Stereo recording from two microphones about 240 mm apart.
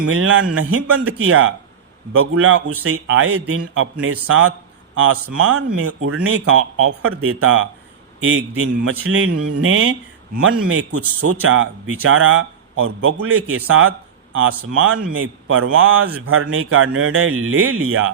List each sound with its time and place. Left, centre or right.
0.1 s a man's voice: right
11.5 s a man's voice: right